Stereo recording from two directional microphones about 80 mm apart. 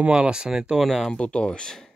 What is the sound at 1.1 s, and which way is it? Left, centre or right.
Speech, centre.